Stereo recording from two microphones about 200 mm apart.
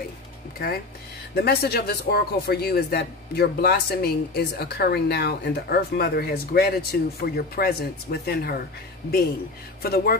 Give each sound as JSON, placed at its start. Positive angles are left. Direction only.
{"t": 1.3, "sound": "a man's voice", "side_deg": 55}
{"t": 9.8, "sound": "a man's voice", "side_deg": 50}